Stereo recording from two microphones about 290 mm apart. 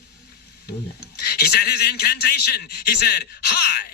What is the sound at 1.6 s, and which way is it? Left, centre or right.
A man's voice, left.